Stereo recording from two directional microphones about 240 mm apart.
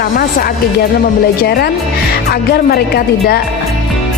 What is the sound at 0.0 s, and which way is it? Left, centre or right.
A woman's voice, left.